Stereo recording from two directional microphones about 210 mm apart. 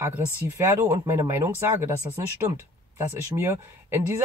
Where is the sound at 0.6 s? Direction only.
15° right (ahead or behind).